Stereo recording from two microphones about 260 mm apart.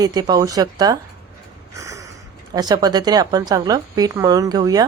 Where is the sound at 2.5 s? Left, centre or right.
Centre.